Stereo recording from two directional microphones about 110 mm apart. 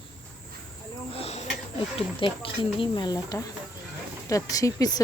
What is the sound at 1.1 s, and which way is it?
Speech, 65° left (ahead or behind).